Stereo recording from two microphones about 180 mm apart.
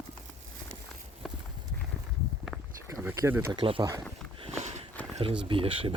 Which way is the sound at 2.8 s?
15° right (ahead or behind).